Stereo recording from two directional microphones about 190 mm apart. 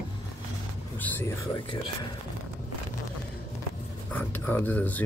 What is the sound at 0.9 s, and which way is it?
Speech, 10° left (ahead or behind).